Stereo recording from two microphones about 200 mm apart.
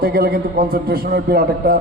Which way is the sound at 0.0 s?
50° right (ahead or behind).